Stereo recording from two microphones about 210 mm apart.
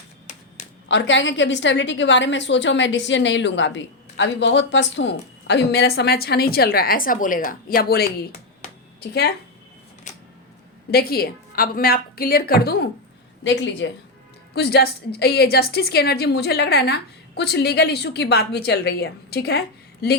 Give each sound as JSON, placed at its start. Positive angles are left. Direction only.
{"t": 0.9, "sound": "a woman's voice", "side_deg": 60}
{"t": 10.1, "sound": "a sound", "side_deg": 35}
{"t": 10.9, "sound": "a woman's voice", "side_deg": 45}